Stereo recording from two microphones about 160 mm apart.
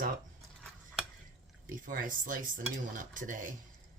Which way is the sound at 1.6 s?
60° right (ahead or behind).